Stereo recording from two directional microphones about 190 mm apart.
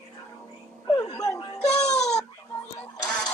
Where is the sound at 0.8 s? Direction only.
20° left (ahead or behind).